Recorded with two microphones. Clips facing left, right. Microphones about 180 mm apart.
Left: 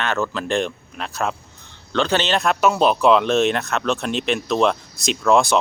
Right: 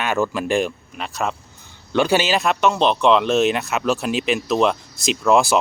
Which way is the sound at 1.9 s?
10° right (ahead or behind).